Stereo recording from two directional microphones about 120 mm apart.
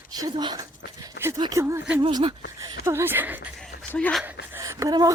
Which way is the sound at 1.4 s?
25° right (ahead or behind).